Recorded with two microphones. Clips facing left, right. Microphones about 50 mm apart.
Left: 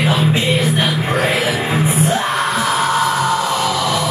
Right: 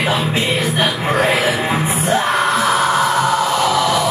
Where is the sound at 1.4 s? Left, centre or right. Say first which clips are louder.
Right 1 dB; centre.